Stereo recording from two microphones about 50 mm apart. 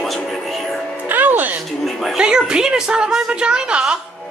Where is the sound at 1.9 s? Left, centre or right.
Centre.